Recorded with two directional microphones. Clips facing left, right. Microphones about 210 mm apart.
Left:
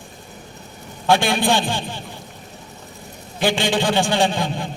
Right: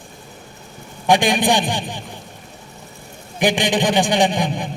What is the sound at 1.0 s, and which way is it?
Speech, 15° right (ahead or behind).